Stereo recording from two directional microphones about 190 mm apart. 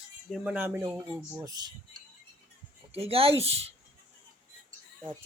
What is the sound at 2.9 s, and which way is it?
Speech, 30° right (ahead or behind).